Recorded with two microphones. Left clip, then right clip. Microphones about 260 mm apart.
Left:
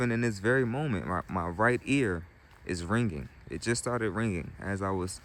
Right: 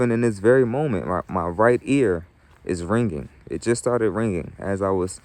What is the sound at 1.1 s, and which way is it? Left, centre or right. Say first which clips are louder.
Speech: right 8 dB; right.